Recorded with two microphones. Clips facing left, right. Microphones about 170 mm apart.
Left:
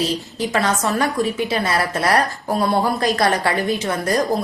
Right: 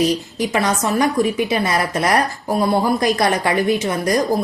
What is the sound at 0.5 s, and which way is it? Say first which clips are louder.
A woman's voice: right 1 dB; 15° right (ahead or behind).